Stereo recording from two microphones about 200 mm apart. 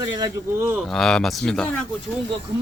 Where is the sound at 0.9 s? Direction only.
Centre (ahead or behind).